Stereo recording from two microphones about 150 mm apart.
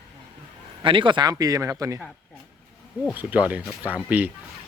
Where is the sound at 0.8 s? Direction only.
35° right (ahead or behind).